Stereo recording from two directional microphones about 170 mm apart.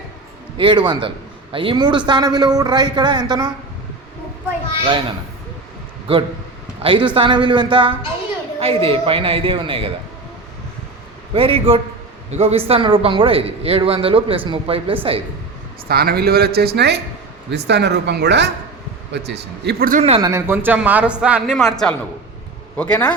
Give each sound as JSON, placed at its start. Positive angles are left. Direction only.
{"t": 0.5, "sound": "a man's voice", "side_deg": -30}
{"t": 6.1, "sound": "a man's voice", "side_deg": -30}
{"t": 11.3, "sound": "a man's voice", "side_deg": -30}
{"t": 15.9, "sound": "speech", "side_deg": -65}
{"t": 19.9, "sound": "a man's voice", "side_deg": -40}
{"t": 20.2, "sound": "a man's voice", "side_deg": -15}